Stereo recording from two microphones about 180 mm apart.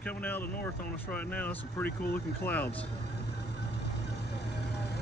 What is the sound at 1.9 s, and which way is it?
Speech, 60° left (ahead or behind).